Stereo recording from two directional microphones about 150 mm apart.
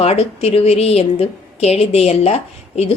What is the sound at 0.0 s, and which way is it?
A woman's voice, 40° left (ahead or behind).